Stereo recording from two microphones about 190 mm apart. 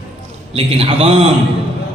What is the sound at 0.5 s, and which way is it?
Speech, 30° right (ahead or behind).